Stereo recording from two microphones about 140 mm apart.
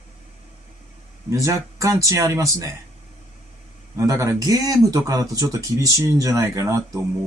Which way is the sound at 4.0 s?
20° right (ahead or behind).